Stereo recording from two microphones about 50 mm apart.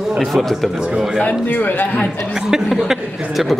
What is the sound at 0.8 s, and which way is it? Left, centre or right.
Speech, centre.